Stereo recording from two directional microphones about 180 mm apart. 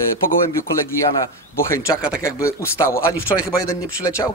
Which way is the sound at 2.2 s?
15° left (ahead or behind).